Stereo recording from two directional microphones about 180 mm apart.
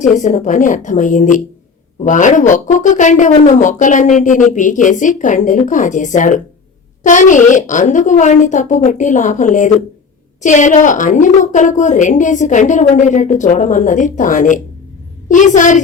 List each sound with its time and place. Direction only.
0.2 s a woman's voice: 45° left (ahead or behind)